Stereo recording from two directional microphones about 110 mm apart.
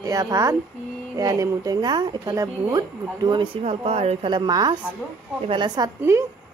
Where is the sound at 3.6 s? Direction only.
65° right (ahead or behind).